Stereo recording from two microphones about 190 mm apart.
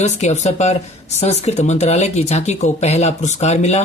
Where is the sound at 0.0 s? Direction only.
35° left (ahead or behind).